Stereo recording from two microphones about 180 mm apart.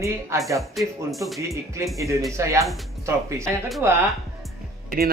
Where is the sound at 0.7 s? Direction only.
Centre (ahead or behind).